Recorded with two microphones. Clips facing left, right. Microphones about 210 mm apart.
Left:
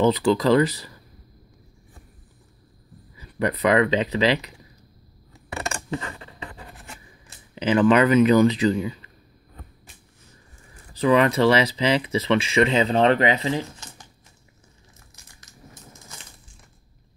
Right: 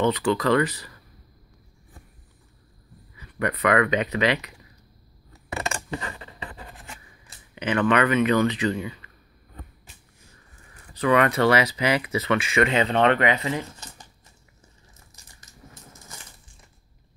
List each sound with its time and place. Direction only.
0.0 s speech: 35° left (ahead or behind)
3.2 s speech: 30° left (ahead or behind)
5.9 s a sound: 15° right (ahead or behind)
7.5 s speech: 30° left (ahead or behind)
11.0 s speech: 30° left (ahead or behind)